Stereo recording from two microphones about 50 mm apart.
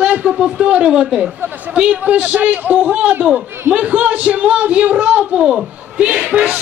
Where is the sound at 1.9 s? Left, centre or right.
Right; by 6.5 s centre.